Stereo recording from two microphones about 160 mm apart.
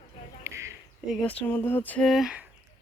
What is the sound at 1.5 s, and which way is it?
Female singing, 15° left (ahead or behind).